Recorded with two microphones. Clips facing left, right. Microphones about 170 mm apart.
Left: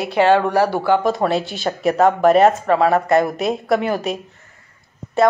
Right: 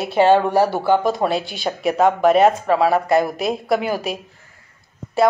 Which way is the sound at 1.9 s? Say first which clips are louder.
Left 1 dB; centre (ahead or behind).